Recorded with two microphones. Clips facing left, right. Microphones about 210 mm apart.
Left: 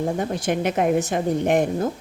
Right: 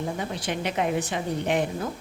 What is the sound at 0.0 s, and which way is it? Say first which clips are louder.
Speech: left 6 dB; 45° left (ahead or behind).